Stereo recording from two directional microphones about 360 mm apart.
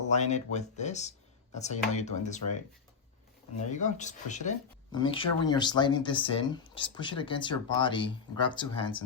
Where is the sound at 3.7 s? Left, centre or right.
Centre.